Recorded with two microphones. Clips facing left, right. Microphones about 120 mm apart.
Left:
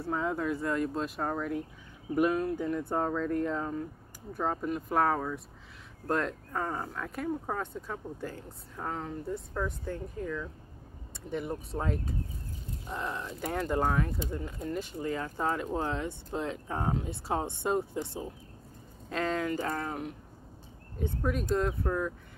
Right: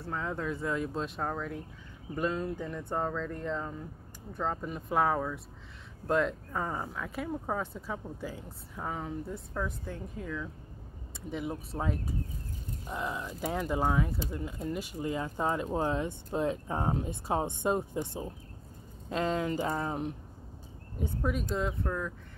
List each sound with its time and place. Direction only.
0.0 s speech: 10° left (ahead or behind); by 20.2 s 25° right (ahead or behind)
21.0 s speech: 5° right (ahead or behind)
21.8 s speech: 10° left (ahead or behind)